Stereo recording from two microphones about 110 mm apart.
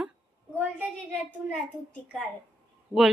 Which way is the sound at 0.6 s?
20° right (ahead or behind).